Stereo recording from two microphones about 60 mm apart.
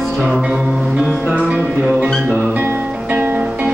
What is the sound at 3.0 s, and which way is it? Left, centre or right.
Music, right.